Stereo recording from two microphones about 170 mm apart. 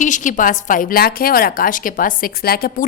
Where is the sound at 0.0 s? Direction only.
50° left (ahead or behind).